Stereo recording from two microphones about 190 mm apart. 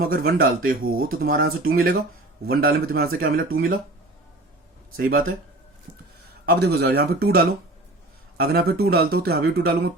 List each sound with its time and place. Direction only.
0.0 s speech: 50° right (ahead or behind)
0.9 s speech: 90° right
1.1 s speech: 50° right (ahead or behind)
4.9 s speech: 50° right (ahead or behind)
6.4 s speech: 55° right (ahead or behind)